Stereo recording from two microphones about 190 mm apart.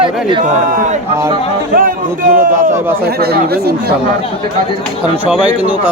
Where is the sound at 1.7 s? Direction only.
50° right (ahead or behind).